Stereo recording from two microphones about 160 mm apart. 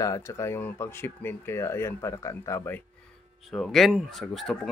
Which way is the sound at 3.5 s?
Centre (ahead or behind).